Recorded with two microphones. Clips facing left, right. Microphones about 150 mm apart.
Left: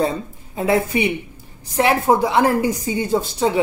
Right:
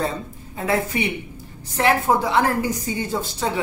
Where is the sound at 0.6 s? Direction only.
15° left (ahead or behind).